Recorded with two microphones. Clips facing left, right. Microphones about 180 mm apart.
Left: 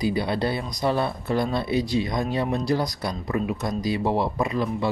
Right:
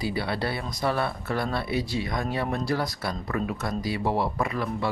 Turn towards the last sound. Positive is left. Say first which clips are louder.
# left 3 dB
turn(degrees=20)  # may be behind; listen again after turning